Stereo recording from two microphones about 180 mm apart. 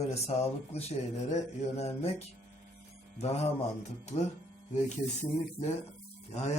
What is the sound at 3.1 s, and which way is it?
Speech, 35° left (ahead or behind).